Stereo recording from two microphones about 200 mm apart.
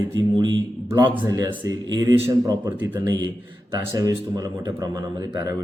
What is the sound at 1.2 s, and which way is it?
Speech, 20° right (ahead or behind).